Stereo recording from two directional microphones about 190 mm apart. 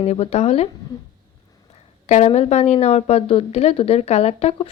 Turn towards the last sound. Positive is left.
turn(degrees=30)  # may be behind; listen again after turning